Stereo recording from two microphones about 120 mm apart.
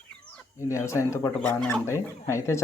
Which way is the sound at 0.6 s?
25° left (ahead or behind).